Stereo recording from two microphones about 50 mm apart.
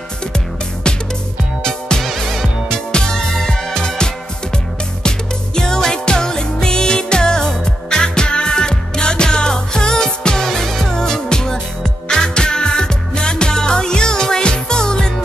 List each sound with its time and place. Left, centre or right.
0.8 s music: centre
2.7 s music: centre